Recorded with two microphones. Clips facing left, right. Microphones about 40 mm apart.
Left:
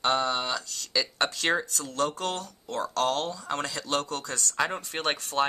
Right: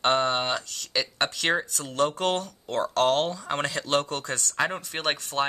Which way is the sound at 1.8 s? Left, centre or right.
Right.